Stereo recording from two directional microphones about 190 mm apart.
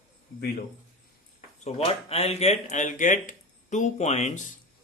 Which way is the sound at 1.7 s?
35° left (ahead or behind).